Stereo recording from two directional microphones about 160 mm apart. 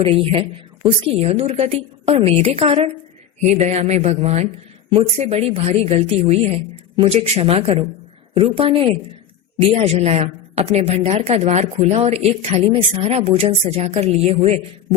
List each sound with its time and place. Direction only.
0.0 s a woman's voice: 35° right (ahead or behind)